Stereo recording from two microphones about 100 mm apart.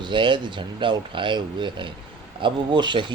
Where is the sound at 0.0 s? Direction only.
55° right (ahead or behind).